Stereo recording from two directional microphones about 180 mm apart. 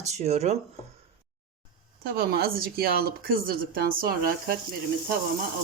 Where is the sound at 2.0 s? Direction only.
60° right (ahead or behind).